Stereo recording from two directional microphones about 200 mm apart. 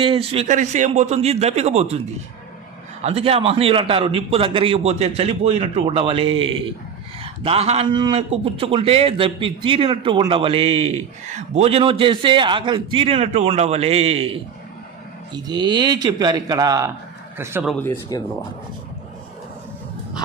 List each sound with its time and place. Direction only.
0.0 s speech: 30° right (ahead or behind)
3.0 s a man's voice: 30° right (ahead or behind); by 17.7 s 10° right (ahead or behind)
17.7 s speech: 10° left (ahead or behind)